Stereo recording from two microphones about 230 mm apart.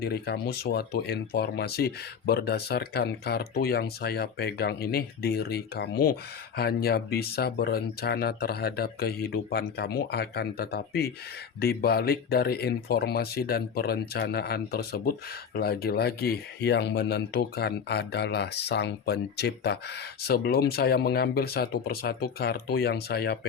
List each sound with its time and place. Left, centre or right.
0.0 s speech: left